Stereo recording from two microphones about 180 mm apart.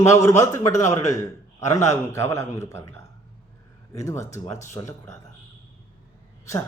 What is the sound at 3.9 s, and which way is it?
Speech, 15° left (ahead or behind).